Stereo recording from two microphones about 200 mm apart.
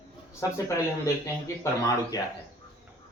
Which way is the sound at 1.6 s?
20° left (ahead or behind).